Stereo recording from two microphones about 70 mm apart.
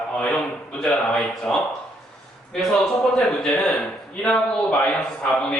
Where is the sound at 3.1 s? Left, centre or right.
Centre.